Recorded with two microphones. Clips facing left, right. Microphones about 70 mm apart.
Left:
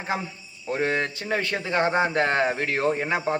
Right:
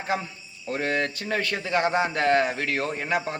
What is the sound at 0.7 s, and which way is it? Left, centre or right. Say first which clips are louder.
A man's voice: left 1 dB; centre.